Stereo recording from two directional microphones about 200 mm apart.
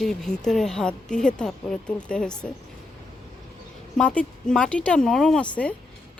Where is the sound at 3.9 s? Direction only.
5° left (ahead or behind).